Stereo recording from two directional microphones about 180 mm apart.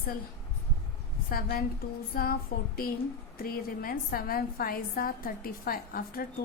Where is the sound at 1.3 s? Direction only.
55° left (ahead or behind).